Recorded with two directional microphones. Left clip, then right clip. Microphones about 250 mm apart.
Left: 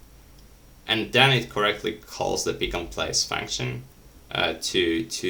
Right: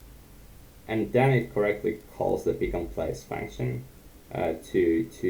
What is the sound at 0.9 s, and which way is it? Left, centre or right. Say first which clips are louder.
Speech: left 5 dB; centre.